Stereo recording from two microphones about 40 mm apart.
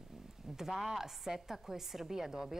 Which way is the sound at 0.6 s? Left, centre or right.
Centre.